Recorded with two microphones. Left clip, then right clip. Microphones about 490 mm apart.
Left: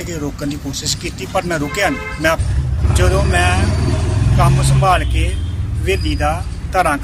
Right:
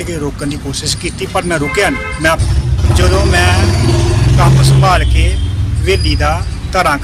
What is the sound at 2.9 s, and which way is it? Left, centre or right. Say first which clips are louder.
Vehicle: right 4 dB; left.